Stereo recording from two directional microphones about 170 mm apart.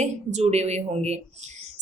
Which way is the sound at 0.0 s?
40° right (ahead or behind).